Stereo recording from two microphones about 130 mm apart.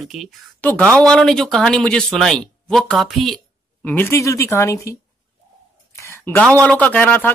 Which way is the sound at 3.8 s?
15° left (ahead or behind).